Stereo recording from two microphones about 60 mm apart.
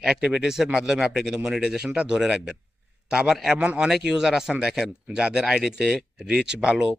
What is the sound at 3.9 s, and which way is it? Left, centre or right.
Speech, centre.